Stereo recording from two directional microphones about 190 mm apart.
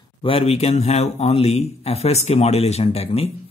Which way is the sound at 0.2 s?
30° left (ahead or behind).